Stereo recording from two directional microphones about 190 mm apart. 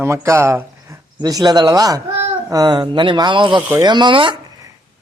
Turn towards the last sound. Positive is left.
turn(degrees=-25)  # may be behind; listen again after turning